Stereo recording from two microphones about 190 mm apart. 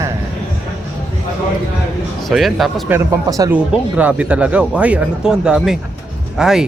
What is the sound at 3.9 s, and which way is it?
Speech, 5° right (ahead or behind).